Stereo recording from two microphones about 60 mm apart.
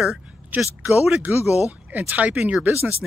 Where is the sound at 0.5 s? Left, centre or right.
Right.